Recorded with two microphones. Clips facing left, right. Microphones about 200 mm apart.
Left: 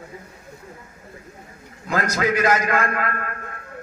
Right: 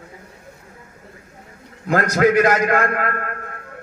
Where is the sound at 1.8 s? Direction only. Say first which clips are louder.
Right 6 dB; 55° right (ahead or behind).